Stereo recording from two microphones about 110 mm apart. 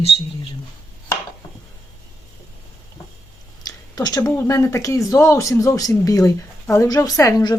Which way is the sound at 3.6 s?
35° left (ahead or behind).